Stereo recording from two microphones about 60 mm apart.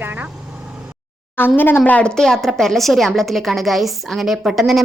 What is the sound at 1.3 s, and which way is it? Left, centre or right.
Speech, left.